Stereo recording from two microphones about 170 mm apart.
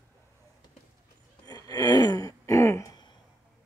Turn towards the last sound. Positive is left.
turn(degrees=20)  # may be behind; listen again after turning